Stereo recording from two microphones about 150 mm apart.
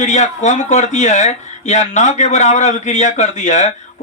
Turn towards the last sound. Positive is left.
turn(degrees=50)  # may be behind; listen again after turning